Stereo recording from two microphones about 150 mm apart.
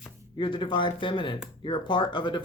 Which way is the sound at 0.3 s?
35° left (ahead or behind).